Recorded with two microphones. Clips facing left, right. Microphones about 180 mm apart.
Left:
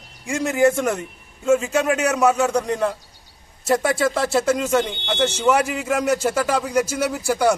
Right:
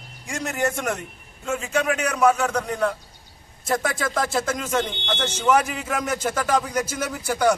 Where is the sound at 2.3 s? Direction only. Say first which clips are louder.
Left 3 dB; 20° left (ahead or behind).